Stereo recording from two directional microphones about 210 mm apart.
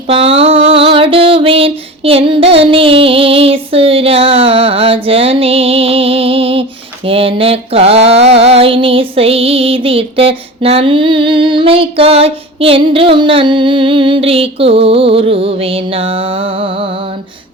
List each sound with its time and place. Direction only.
0.1 s female singing: 25° right (ahead or behind)